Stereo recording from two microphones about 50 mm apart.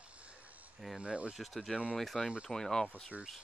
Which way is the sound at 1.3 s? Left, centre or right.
Centre.